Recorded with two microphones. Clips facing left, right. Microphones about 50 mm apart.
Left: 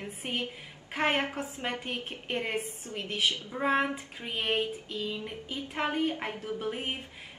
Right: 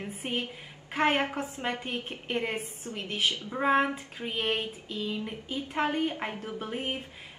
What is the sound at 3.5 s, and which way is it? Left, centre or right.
Speech, centre.